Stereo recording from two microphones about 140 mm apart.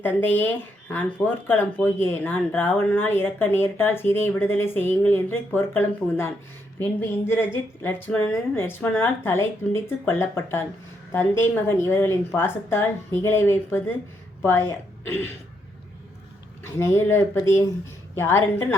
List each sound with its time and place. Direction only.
0.0 s speech: 15° left (ahead or behind)
16.6 s speech: 20° left (ahead or behind)